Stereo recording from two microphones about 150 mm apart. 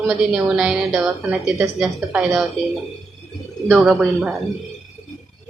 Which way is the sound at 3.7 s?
Centre (ahead or behind).